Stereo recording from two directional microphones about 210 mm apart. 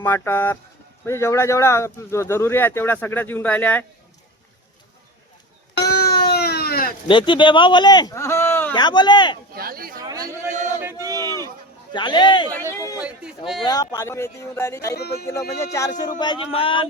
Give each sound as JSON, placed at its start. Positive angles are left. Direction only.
{"t": 0.0, "sound": "speech", "side_deg": 10}
{"t": 5.7, "sound": "a sound", "side_deg": 50}
{"t": 7.1, "sound": "speech", "side_deg": 25}
{"t": 8.7, "sound": "speech", "side_deg": 20}
{"t": 9.6, "sound": "chatter", "side_deg": -45}
{"t": 10.0, "sound": "a sound", "side_deg": -15}
{"t": 11.9, "sound": "speech", "side_deg": 20}
{"t": 13.0, "sound": "a sound", "side_deg": -5}
{"t": 13.6, "sound": "speech", "side_deg": 20}